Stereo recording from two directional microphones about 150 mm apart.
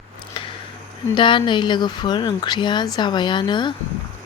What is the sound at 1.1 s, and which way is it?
Speech, 35° left (ahead or behind).